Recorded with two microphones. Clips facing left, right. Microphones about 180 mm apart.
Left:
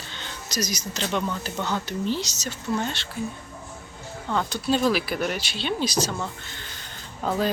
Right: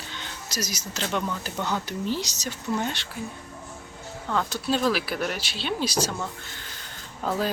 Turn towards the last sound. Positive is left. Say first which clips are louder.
# left 1 dB
turn(degrees=-5)  # may be behind; listen again after turning